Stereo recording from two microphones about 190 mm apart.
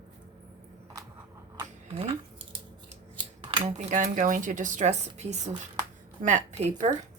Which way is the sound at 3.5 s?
35° right (ahead or behind).